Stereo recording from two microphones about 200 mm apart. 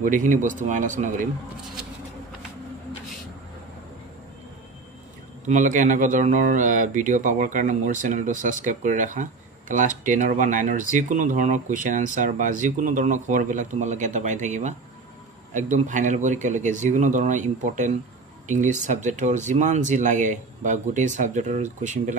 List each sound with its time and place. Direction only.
0.0 s speech: 40° right (ahead or behind)
5.5 s speech: 40° right (ahead or behind)